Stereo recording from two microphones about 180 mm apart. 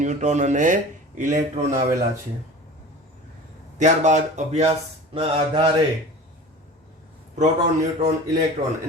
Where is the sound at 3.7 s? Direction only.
40° right (ahead or behind).